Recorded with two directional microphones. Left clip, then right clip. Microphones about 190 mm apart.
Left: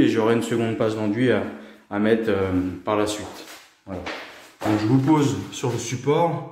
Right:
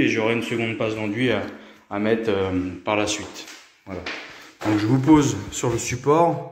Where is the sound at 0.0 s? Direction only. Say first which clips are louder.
Left 2 dB; 15° left (ahead or behind).